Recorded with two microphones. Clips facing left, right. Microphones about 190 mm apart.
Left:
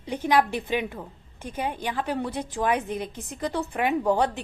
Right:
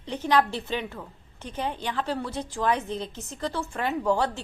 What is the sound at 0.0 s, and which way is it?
A woman's voice, 10° left (ahead or behind).